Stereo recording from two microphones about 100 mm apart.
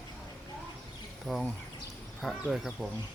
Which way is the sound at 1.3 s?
Centre (ahead or behind).